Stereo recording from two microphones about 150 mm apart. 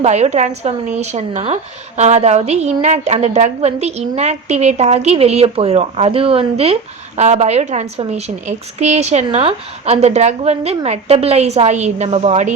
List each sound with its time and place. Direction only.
0.0 s a woman's voice: 45° right (ahead or behind)